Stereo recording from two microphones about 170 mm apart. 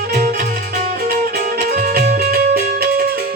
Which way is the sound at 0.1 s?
60° right (ahead or behind).